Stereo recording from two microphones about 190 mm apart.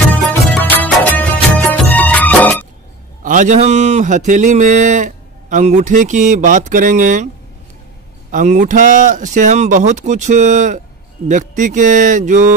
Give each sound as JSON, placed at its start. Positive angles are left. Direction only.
{"t": 0.3, "sound": "music", "side_deg": 10}
{"t": 3.3, "sound": "speech", "side_deg": -40}
{"t": 8.3, "sound": "speech", "side_deg": -40}